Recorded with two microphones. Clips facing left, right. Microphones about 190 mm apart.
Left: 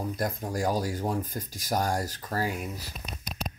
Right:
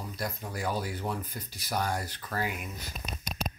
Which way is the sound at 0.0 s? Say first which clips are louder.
Left 6 dB; 50° left (ahead or behind).